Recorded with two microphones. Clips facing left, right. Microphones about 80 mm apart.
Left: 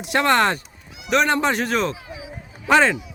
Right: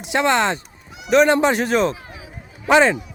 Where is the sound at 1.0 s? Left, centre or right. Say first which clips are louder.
Right 4 dB; centre.